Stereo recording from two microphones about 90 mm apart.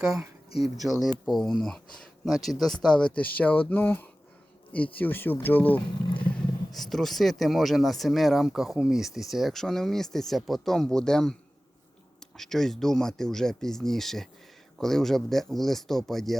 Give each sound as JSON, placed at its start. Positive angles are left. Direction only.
{"t": 0.8, "sound": "speech", "side_deg": 0}
{"t": 6.7, "sound": "speech", "side_deg": 5}